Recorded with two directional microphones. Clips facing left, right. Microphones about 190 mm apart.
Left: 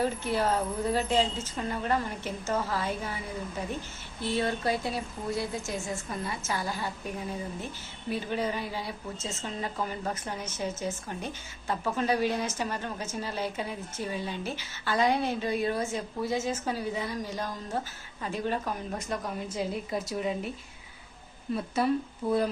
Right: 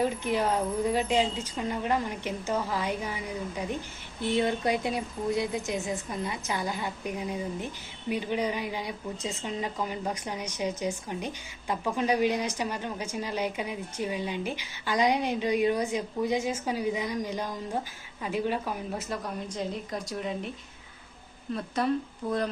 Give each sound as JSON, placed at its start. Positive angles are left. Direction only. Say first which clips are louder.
{"t": 0.0, "sound": "a woman's voice", "louder": "right 1 dB", "side_deg": -15}
{"t": 4.4, "sound": "a woman's voice", "louder": "right 2 dB", "side_deg": -20}
{"t": 21.5, "sound": "speech", "louder": "left 1 dB", "side_deg": 5}